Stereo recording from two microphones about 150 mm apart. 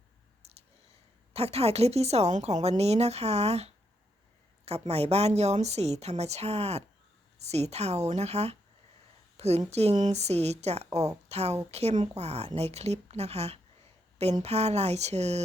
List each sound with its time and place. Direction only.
1.3 s a woman's voice: 45° right (ahead or behind)